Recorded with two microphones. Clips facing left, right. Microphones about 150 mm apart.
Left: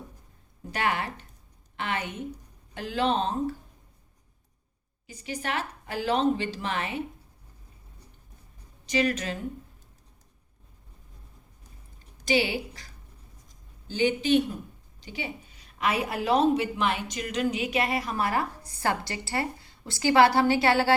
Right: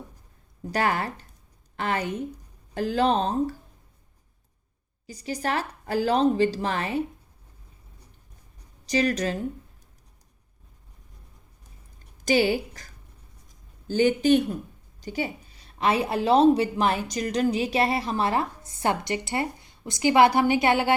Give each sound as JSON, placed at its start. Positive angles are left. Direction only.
{"t": 0.7, "sound": "a woman's voice", "side_deg": -40}
{"t": 5.0, "sound": "a woman's voice", "side_deg": -35}
{"t": 8.9, "sound": "a woman's voice", "side_deg": -40}
{"t": 12.2, "sound": "a woman's voice", "side_deg": -45}